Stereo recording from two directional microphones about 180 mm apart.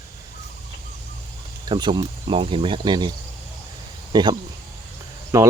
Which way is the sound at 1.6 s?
25° right (ahead or behind).